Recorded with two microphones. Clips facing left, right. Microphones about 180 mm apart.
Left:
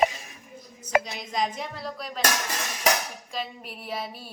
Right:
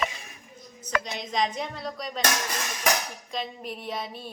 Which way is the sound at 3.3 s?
5° left (ahead or behind).